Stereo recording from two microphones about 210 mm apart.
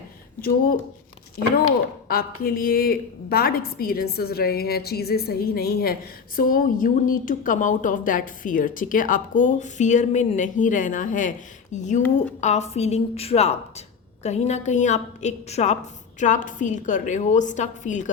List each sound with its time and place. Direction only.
2.0 s a woman's voice: 45° left (ahead or behind)